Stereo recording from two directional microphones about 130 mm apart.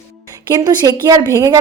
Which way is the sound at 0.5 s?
25° right (ahead or behind).